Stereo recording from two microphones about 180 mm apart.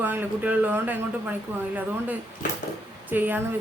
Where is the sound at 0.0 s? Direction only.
10° right (ahead or behind).